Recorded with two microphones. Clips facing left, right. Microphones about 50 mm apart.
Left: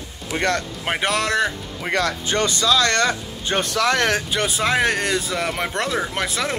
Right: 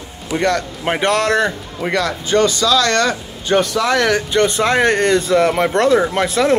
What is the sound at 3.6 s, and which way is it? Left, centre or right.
Speech, left.